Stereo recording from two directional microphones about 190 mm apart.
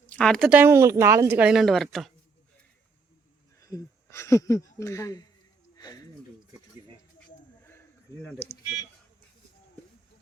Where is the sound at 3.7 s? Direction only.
15° left (ahead or behind).